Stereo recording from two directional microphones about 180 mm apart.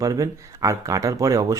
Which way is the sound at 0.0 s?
20° right (ahead or behind).